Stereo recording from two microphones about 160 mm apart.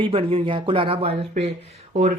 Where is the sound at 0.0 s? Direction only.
35° right (ahead or behind).